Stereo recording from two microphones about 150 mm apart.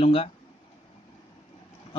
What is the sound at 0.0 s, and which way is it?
Speech, 40° left (ahead or behind).